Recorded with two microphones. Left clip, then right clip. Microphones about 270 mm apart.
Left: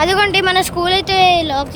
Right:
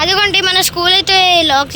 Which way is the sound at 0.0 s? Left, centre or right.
Centre.